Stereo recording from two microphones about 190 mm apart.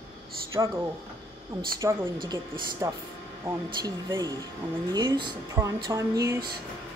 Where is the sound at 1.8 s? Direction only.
15° right (ahead or behind).